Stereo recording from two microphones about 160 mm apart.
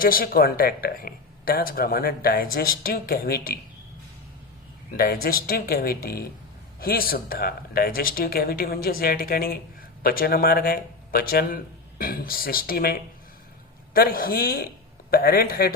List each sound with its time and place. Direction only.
0.0 s speech: 65° left (ahead or behind)
4.9 s speech: 70° left (ahead or behind)